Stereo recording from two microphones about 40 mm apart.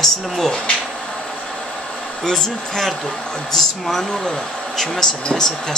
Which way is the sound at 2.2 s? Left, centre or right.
Centre.